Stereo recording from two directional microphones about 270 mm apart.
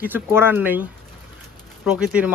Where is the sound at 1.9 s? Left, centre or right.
Centre.